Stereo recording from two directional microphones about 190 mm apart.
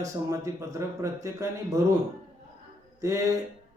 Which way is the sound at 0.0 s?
15° right (ahead or behind).